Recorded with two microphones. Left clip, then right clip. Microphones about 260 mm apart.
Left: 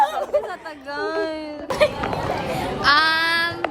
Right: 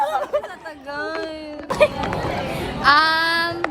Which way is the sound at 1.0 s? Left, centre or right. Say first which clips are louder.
Left 3 dB; centre.